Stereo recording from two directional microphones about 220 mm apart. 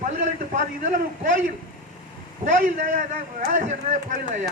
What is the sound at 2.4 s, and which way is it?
A man's voice, 35° right (ahead or behind).